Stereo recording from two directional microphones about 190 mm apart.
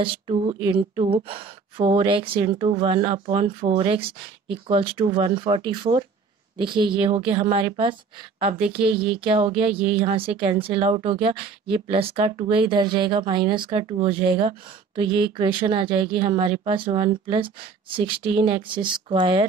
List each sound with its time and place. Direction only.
0.0 s speech: 30° right (ahead or behind)
9.2 s speech: 30° right (ahead or behind)